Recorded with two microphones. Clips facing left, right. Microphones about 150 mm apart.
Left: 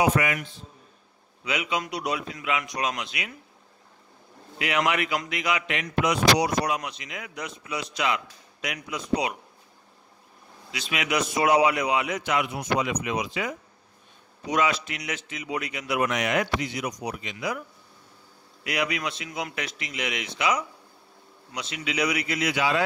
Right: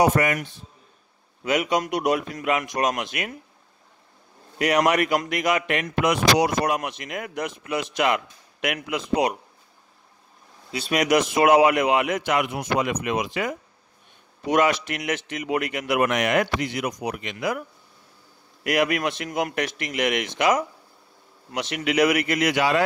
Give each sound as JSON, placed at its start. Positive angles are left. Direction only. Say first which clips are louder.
{"t": 0.1, "sound": "a man's voice", "louder": "right 3 dB", "side_deg": -45}
{"t": 1.4, "sound": "a man's voice", "louder": "right 6 dB", "side_deg": -45}
{"t": 4.6, "sound": "a man's voice", "louder": "right 5 dB", "side_deg": -45}
{"t": 10.9, "sound": "a man's voice", "louder": "right 7 dB", "side_deg": -45}